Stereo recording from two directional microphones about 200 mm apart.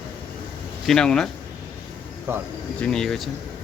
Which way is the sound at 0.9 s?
5° left (ahead or behind).